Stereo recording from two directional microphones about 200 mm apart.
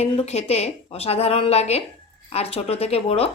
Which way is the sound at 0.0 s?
30° left (ahead or behind).